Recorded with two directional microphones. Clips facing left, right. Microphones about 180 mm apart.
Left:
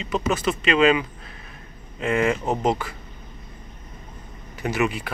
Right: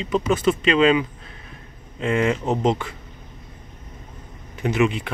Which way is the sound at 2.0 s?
5° left (ahead or behind).